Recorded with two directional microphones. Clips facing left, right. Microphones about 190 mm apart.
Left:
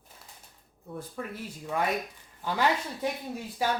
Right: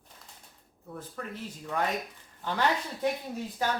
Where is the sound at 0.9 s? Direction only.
10° left (ahead or behind).